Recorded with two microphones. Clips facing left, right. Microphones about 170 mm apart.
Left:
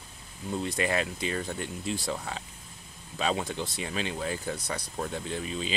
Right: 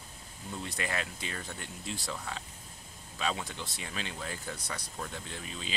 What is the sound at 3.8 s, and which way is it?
Speech, 20° left (ahead or behind).